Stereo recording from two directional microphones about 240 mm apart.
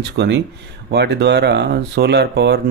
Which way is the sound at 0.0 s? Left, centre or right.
Right.